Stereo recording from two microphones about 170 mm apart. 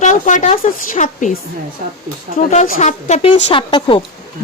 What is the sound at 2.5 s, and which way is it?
Speech, 45° left (ahead or behind).